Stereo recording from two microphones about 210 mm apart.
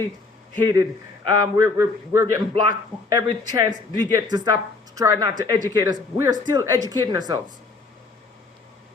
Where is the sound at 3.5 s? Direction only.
20° right (ahead or behind).